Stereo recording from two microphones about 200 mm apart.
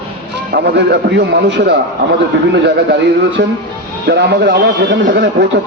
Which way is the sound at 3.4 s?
55° right (ahead or behind).